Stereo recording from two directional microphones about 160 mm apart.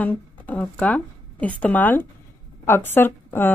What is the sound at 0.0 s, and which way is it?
A woman's voice, 10° left (ahead or behind).